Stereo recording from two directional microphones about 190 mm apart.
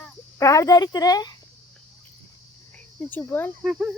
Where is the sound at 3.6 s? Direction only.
5° right (ahead or behind).